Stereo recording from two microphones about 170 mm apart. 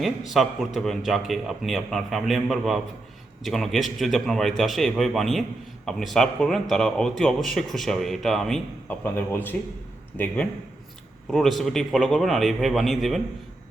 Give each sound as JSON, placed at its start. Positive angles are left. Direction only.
{"t": 0.0, "sound": "a man's voice", "side_deg": 0}